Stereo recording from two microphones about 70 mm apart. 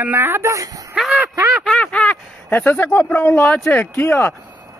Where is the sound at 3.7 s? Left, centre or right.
Left.